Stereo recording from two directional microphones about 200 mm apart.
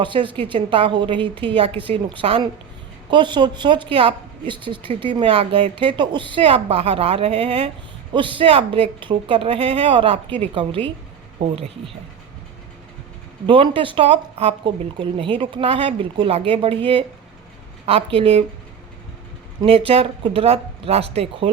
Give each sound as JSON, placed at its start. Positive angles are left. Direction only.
{"t": 0.0, "sound": "speech", "side_deg": -25}
{"t": 13.5, "sound": "speech", "side_deg": -25}
{"t": 19.6, "sound": "speech", "side_deg": -30}